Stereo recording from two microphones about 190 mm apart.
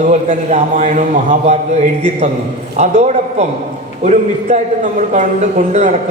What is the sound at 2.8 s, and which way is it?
A man's voice, 35° right (ahead or behind).